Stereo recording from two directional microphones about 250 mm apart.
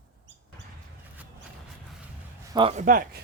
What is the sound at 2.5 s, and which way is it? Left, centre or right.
Speech, right.